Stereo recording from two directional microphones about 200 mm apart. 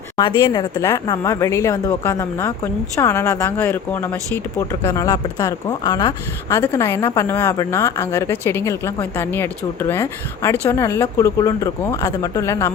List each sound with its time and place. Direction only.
0.2 s speech: 20° left (ahead or behind)